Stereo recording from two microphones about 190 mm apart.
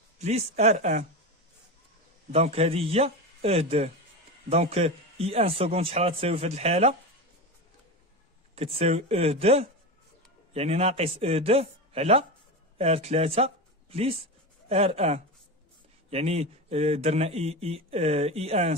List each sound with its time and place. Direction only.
0.2 s speech: 35° right (ahead or behind)
2.3 s speech: 30° right (ahead or behind)
8.5 s speech: 30° right (ahead or behind)